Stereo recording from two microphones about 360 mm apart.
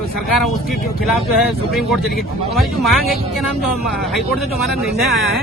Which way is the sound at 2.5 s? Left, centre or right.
Centre.